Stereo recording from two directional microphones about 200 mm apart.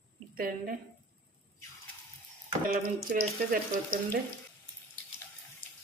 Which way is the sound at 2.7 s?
45° right (ahead or behind).